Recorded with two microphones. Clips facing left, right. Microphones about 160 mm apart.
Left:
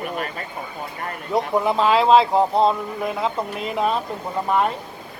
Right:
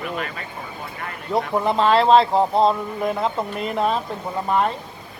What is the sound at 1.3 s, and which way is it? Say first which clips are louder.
Speech: even; 5° left (ahead or behind).